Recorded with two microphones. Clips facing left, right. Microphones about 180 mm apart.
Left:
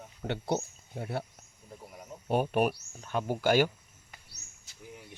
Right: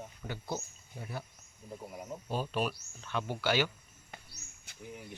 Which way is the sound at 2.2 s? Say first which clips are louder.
Left 7 dB; 60° left (ahead or behind).